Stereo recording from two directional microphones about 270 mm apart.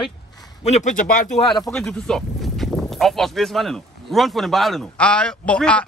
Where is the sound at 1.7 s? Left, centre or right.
Centre.